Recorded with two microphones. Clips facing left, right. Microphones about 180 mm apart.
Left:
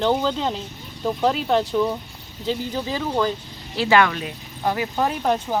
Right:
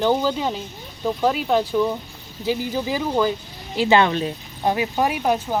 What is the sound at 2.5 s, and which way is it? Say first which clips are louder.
Speech: right 2 dB; 10° right (ahead or behind).